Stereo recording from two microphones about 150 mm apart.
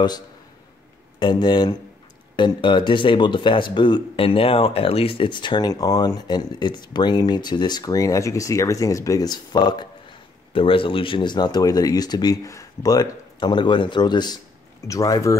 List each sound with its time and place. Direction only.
1.2 s speech: 30° left (ahead or behind)